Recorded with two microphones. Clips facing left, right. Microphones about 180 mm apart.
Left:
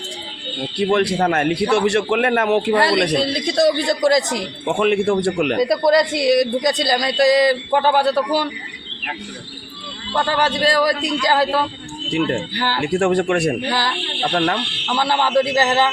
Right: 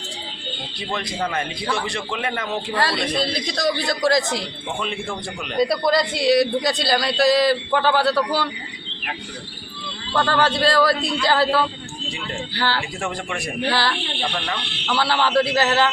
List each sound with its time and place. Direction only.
0.8 s a man's voice: 70° left (ahead or behind)
3.2 s a man's voice: 25° left (ahead or behind)
4.6 s speech: 70° left (ahead or behind)
5.8 s a man's voice: 20° left (ahead or behind)
10.2 s a man's voice: 10° left (ahead or behind)
12.8 s a man's voice: 70° left (ahead or behind)
13.7 s a man's voice: 15° left (ahead or behind)
14.3 s speech: 60° left (ahead or behind)
14.9 s a man's voice: 15° left (ahead or behind)